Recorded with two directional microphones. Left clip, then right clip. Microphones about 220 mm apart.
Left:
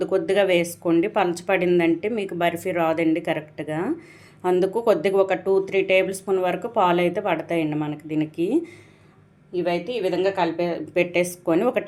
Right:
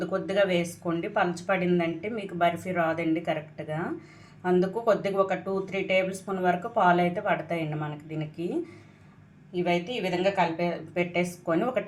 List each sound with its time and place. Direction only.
0.0 s speech: 45° left (ahead or behind)
9.5 s a woman's voice: 35° left (ahead or behind)